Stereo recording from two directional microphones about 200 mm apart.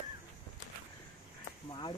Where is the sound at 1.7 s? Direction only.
25° left (ahead or behind).